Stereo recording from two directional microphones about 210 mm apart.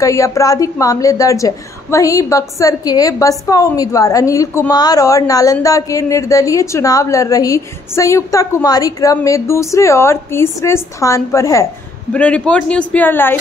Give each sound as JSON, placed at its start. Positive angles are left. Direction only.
{"t": 0.0, "sound": "a woman's voice", "side_deg": 15}